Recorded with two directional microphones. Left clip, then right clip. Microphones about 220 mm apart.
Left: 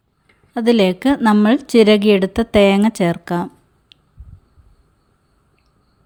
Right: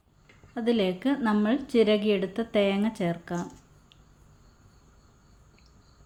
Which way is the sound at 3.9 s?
45° left (ahead or behind).